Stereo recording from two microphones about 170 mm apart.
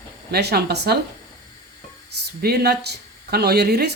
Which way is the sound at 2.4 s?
70° right (ahead or behind).